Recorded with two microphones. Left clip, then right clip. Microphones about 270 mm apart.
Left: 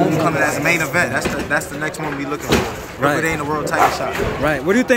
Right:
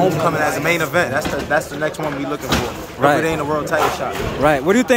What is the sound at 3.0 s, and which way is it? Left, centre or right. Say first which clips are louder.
Speech: right 2 dB; centre.